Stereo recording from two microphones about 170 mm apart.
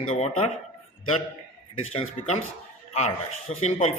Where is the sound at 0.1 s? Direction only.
35° left (ahead or behind).